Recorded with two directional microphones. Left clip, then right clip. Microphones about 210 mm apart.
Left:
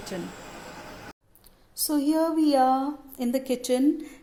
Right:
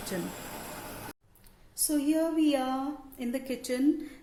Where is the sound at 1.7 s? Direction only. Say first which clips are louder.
Left 4 dB; 30° left (ahead or behind).